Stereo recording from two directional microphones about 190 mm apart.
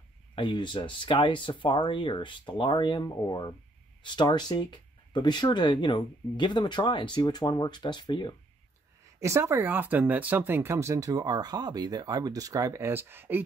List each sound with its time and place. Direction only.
0.4 s speech: 25° left (ahead or behind)
9.2 s speech: 15° right (ahead or behind)